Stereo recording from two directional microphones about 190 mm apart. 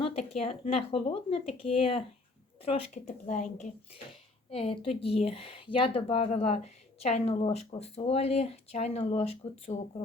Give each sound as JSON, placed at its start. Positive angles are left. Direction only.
{"t": 0.0, "sound": "speech", "side_deg": 35}
{"t": 4.5, "sound": "speech", "side_deg": 30}